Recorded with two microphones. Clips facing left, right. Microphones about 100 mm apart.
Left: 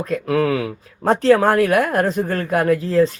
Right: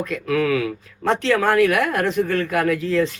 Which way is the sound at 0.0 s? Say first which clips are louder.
Left 2 dB; 35° left (ahead or behind).